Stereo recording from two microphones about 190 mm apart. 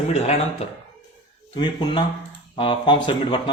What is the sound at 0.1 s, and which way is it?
Speech, 35° left (ahead or behind).